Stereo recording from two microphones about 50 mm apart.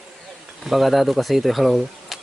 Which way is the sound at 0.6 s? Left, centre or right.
Centre.